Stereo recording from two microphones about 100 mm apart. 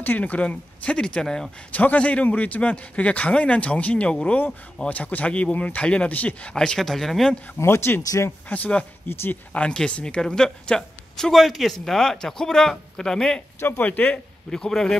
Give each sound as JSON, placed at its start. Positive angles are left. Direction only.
{"t": 0.0, "sound": "a man's voice", "side_deg": 15}
{"t": 7.5, "sound": "speech", "side_deg": 25}
{"t": 8.0, "sound": "speech", "side_deg": 35}
{"t": 8.5, "sound": "a man's voice", "side_deg": 15}
{"t": 13.6, "sound": "a man's voice", "side_deg": 20}